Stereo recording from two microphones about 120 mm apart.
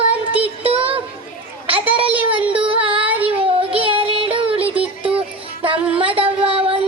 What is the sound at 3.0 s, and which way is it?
Child singing, 15° right (ahead or behind).